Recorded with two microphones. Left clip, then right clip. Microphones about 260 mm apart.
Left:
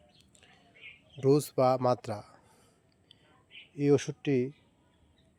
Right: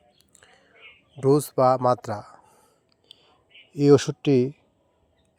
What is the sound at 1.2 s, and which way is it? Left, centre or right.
Speech, centre.